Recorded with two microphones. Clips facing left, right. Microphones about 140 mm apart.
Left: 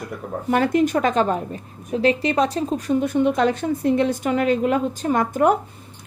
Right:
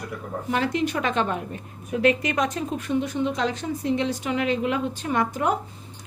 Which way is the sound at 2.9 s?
50° left (ahead or behind).